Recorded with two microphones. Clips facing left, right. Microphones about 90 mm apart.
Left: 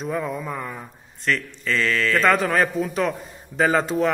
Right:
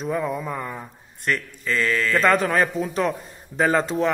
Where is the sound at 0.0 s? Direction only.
Centre (ahead or behind).